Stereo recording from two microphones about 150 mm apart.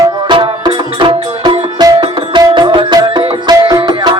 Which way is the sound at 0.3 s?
30° right (ahead or behind).